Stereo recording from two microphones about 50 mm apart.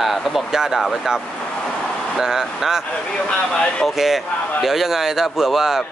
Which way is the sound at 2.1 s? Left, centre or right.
Centre.